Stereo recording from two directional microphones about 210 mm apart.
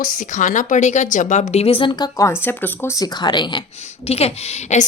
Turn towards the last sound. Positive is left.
turn(degrees=30)  # may be behind; listen again after turning